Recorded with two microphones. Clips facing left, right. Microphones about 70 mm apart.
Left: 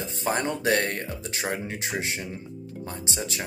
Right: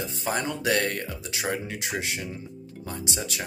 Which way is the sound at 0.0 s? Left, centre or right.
Left.